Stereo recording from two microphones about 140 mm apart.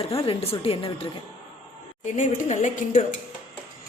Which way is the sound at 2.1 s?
65° left (ahead or behind).